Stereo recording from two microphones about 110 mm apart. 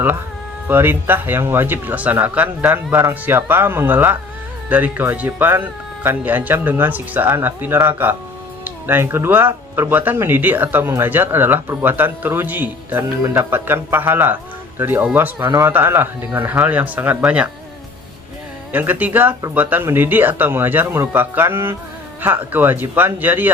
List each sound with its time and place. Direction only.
0.7 s speech: 20° right (ahead or behind)
15.4 s speech: 30° right (ahead or behind); by 17.5 s 10° right (ahead or behind)
18.7 s speech: 15° right (ahead or behind)